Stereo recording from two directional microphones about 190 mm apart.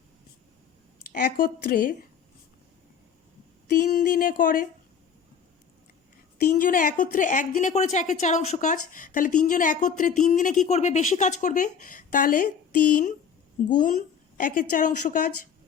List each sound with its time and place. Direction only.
1.0 s a woman's voice: 45° left (ahead or behind)
3.8 s a woman's voice: 45° left (ahead or behind)
6.4 s a woman's voice: 45° left (ahead or behind)